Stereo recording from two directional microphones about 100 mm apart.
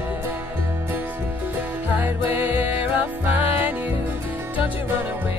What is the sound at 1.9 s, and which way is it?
Music, 15° right (ahead or behind).